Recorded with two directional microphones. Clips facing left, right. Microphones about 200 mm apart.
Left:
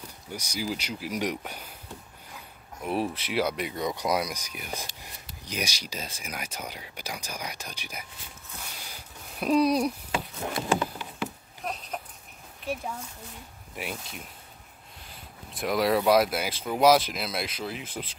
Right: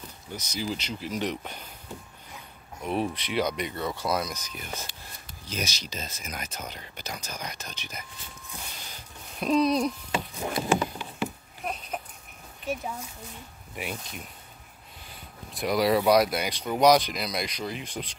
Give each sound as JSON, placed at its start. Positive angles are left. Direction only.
{"t": 0.3, "sound": "speech", "side_deg": 10}
{"t": 2.8, "sound": "speech", "side_deg": 5}
{"t": 8.7, "sound": "a sound", "side_deg": 10}
{"t": 10.3, "sound": "a sound", "side_deg": -5}
{"t": 13.7, "sound": "speech", "side_deg": 0}
{"t": 15.5, "sound": "speech", "side_deg": 0}